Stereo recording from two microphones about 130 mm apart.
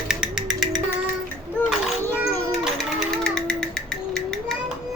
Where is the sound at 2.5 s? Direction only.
5° left (ahead or behind).